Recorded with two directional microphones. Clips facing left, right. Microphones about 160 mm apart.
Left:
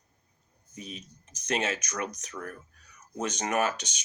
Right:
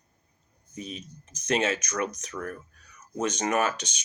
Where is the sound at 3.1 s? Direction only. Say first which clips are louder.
Right 3 dB; 15° left (ahead or behind).